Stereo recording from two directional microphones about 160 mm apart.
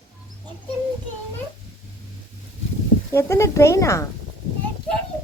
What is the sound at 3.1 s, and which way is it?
Speech, 20° left (ahead or behind).